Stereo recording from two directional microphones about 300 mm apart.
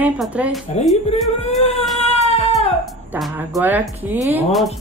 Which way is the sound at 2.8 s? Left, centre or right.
Centre.